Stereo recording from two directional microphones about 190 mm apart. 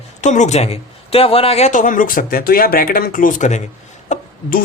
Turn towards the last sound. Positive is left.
turn(degrees=50)  # may be behind; listen again after turning